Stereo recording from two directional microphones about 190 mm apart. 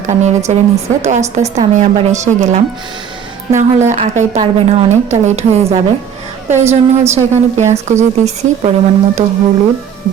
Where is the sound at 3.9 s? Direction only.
40° right (ahead or behind).